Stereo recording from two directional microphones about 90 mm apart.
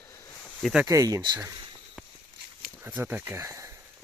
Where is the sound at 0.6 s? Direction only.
5° right (ahead or behind).